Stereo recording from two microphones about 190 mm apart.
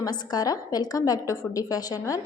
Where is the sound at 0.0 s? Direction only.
20° left (ahead or behind).